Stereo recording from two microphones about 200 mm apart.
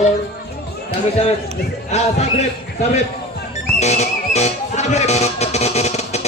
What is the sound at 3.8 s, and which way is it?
Music, 35° left (ahead or behind).